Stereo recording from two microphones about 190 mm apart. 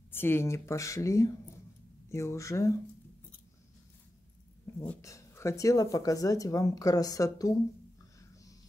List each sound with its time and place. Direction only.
0.1 s speech: 10° left (ahead or behind)
4.8 s speech: 15° left (ahead or behind)